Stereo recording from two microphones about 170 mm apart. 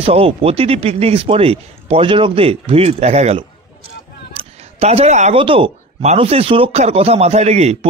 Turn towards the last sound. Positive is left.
turn(degrees=-40)  # may be behind; listen again after turning